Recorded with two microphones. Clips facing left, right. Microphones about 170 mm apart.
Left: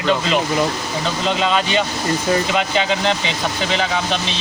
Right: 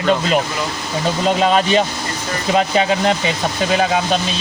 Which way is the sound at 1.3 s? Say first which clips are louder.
Right 4 dB; 45° right (ahead or behind).